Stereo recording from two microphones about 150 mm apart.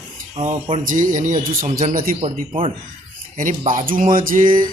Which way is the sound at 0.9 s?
60° right (ahead or behind).